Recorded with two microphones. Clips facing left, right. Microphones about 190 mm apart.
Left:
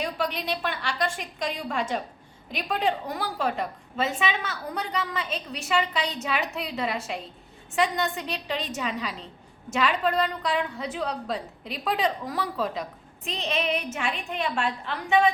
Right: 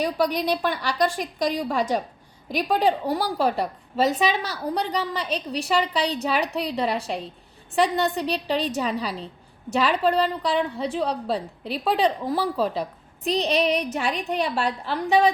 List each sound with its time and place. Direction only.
0.0 s a woman's voice: 40° right (ahead or behind)